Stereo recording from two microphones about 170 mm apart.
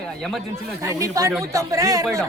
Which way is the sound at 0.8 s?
20° right (ahead or behind).